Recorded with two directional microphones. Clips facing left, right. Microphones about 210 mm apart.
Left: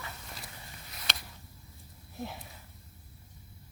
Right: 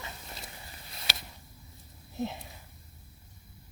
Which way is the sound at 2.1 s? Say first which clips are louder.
Right 6 dB; 20° right (ahead or behind).